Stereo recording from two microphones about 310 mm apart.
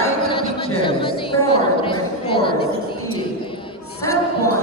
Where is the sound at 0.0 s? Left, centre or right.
Centre.